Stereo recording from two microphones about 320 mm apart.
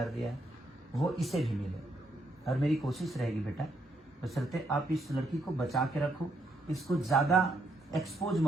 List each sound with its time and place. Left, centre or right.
0.0 s speech: centre